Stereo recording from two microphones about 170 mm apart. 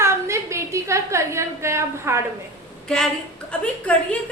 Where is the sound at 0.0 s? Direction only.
15° right (ahead or behind).